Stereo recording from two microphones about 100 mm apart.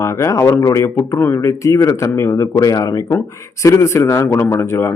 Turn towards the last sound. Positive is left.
turn(degrees=25)  # may be behind; listen again after turning